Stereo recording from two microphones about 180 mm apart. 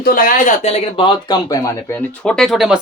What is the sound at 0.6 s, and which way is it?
A man's voice, 30° left (ahead or behind).